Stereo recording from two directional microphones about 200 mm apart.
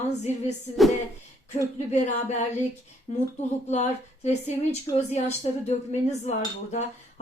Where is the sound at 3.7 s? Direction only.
35° left (ahead or behind).